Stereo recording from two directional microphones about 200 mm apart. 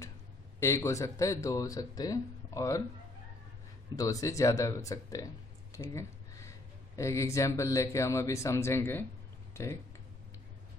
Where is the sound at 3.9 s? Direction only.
15° left (ahead or behind).